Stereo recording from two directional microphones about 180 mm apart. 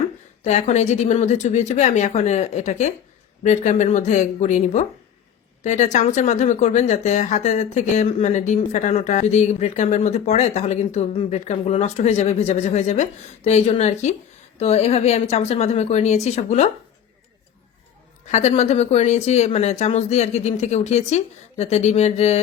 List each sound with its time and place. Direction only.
0.4 s speech: 40° left (ahead or behind)
18.3 s speech: 40° left (ahead or behind)